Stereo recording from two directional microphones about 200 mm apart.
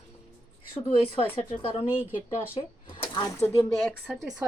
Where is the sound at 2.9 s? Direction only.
25° left (ahead or behind).